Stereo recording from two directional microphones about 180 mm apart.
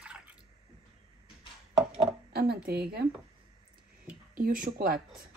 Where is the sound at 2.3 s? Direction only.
60° right (ahead or behind).